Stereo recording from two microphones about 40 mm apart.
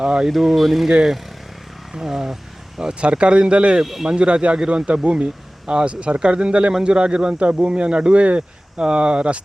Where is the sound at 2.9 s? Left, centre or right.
Right.